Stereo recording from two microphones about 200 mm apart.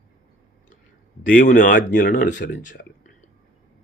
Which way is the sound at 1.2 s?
40° left (ahead or behind).